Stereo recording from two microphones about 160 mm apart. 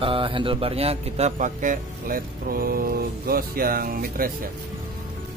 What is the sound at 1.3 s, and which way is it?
Speech, 55° right (ahead or behind).